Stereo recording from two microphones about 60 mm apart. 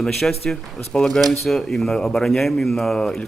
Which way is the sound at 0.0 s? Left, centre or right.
Centre.